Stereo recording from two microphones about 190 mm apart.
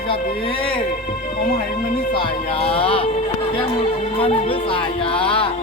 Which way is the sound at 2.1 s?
30° left (ahead or behind).